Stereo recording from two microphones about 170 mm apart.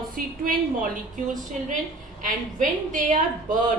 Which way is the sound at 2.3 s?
50° right (ahead or behind).